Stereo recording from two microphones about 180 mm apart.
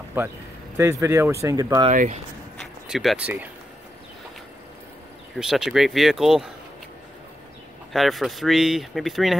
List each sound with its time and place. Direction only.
0.2 s speech: 10° right (ahead or behind)
1.9 s speech: 40° right (ahead or behind)
2.9 s speech: centre (ahead or behind)
5.3 s speech: centre (ahead or behind)
7.9 s speech: centre (ahead or behind)